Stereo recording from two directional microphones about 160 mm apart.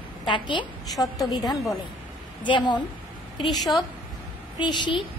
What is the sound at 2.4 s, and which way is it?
Speech, 30° left (ahead or behind).